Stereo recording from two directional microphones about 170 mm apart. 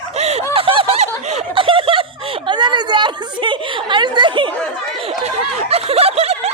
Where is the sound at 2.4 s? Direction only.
25° right (ahead or behind).